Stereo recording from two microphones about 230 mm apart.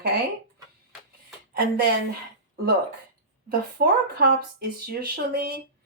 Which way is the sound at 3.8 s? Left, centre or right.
Right.